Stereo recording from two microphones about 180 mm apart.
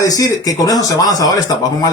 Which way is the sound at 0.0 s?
20° left (ahead or behind).